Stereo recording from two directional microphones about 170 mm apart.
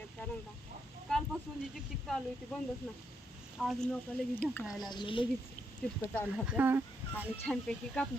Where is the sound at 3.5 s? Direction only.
Centre (ahead or behind).